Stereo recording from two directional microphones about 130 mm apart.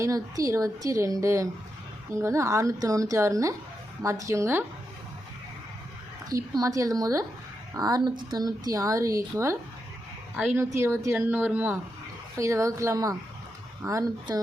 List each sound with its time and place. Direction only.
0.0 s speech: 25° right (ahead or behind)
6.6 s speech: 25° right (ahead or behind)
10.3 s speech: 10° right (ahead or behind)
10.6 s speech: 20° right (ahead or behind)
12.4 s speech: 25° right (ahead or behind)